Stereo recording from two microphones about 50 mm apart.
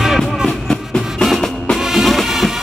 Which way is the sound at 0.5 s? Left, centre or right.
Centre.